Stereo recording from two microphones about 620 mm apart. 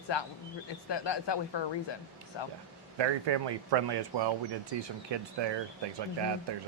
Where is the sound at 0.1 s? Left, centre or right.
Left.